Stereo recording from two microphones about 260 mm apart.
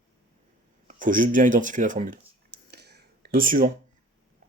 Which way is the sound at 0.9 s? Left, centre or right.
Right.